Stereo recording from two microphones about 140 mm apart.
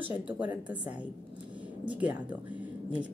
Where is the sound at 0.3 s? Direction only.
10° right (ahead or behind).